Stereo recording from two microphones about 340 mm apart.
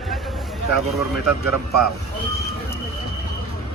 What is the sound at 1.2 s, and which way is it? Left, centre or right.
Speech, right.